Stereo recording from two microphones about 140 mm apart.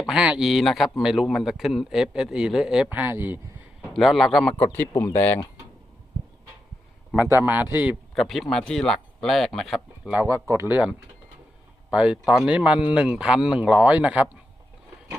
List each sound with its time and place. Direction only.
0.1 s a man's voice: 5° right (ahead or behind)
3.9 s a man's voice: centre (ahead or behind)
4.6 s speech: 15° left (ahead or behind)
7.3 s speech: 15° right (ahead or behind)
8.1 s a man's voice: centre (ahead or behind)
10.1 s speech: 20° right (ahead or behind)